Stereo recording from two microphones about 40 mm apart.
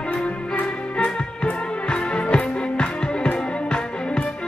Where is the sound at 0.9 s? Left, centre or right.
Left.